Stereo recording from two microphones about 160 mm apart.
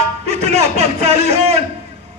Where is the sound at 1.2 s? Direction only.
40° right (ahead or behind).